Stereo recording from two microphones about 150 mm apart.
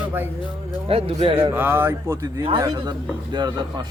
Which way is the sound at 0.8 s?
40° right (ahead or behind).